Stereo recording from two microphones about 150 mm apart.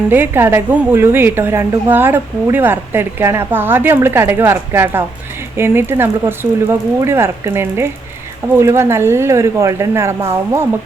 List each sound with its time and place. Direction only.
0.1 s a woman's voice: 15° right (ahead or behind)